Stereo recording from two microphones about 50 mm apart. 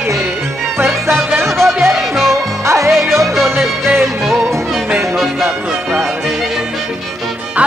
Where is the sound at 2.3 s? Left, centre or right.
Right.